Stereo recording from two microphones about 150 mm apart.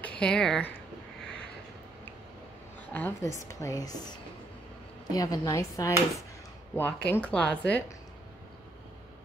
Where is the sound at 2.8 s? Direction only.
10° left (ahead or behind).